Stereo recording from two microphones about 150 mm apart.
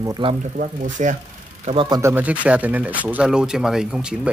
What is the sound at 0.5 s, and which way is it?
Speech, 60° right (ahead or behind).